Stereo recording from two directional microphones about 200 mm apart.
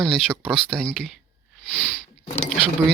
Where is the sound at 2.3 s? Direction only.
30° left (ahead or behind).